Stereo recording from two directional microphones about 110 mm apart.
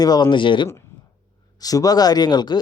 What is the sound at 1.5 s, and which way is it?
Speech, 35° left (ahead or behind).